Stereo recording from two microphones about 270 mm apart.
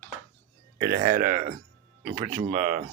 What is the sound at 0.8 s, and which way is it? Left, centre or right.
Speech, right.